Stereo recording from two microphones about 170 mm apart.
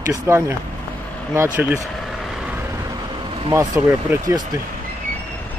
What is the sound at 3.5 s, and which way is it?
Speech, 15° right (ahead or behind).